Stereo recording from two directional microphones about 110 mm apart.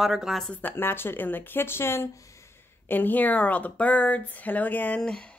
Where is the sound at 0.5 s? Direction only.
20° left (ahead or behind).